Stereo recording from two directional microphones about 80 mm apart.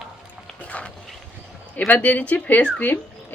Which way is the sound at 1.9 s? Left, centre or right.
Centre.